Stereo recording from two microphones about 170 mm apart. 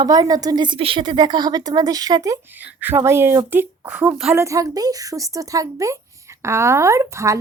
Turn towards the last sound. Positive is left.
turn(degrees=-15)  # may be behind; listen again after turning